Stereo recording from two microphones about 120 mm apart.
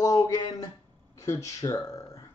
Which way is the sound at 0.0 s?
25° left (ahead or behind).